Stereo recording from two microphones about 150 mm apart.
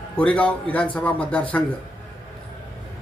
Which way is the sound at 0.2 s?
10° left (ahead or behind).